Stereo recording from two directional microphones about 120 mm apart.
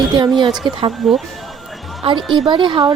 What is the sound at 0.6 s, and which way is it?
Speech, 50° right (ahead or behind).